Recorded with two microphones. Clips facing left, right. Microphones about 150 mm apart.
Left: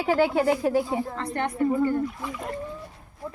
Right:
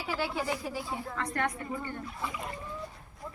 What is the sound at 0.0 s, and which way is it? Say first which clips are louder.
Speech: left 12 dB; 55° left (ahead or behind).